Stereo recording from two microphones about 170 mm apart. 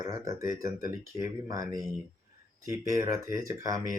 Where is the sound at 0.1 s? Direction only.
20° right (ahead or behind).